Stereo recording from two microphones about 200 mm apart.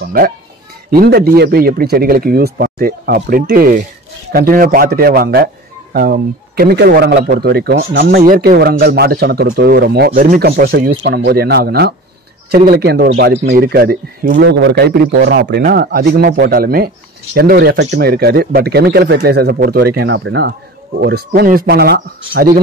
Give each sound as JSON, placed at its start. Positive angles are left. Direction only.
{"t": 0.0, "sound": "speech", "side_deg": -45}